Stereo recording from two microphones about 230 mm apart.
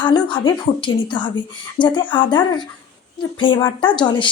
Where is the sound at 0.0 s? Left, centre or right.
Centre.